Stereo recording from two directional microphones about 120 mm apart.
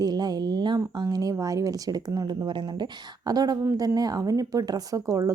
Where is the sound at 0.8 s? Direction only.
30° right (ahead or behind).